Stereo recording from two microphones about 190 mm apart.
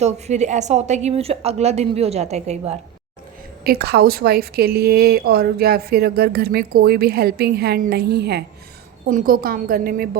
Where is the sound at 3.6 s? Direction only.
55° right (ahead or behind).